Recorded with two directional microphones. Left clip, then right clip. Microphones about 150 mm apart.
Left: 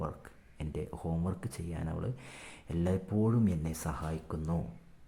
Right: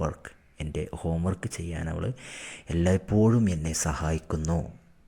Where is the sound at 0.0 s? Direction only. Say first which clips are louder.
Right 8 dB; 20° right (ahead or behind).